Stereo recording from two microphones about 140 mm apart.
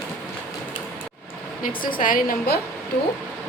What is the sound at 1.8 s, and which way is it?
Speech, 85° left.